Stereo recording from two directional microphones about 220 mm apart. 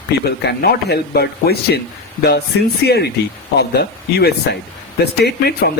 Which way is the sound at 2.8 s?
45° left (ahead or behind).